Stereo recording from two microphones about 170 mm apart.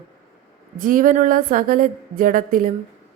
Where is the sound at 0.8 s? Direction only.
55° right (ahead or behind).